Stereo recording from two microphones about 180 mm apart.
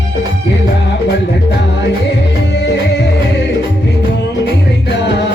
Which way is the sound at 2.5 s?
75° left (ahead or behind).